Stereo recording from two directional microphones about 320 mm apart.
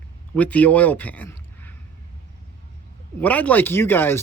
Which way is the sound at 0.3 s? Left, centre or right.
Centre.